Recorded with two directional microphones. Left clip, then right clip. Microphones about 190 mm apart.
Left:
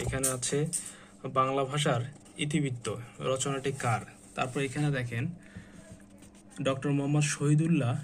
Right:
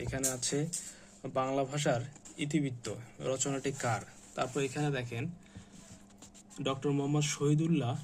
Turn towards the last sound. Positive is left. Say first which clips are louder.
# left 2 dB
turn(degrees=-10)  # may be behind; listen again after turning